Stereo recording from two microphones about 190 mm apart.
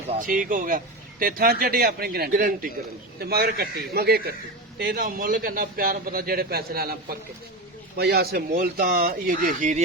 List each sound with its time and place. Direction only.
0.2 s a man's voice: 45° right (ahead or behind)